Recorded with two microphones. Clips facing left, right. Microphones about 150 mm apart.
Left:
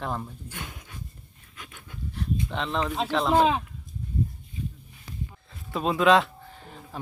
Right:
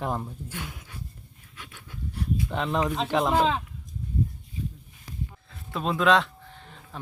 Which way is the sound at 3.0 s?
10° right (ahead or behind).